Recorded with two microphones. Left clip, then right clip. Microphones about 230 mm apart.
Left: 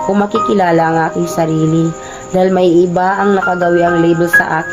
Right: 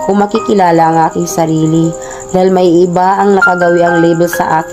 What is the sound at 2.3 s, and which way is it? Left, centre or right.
Speech, right.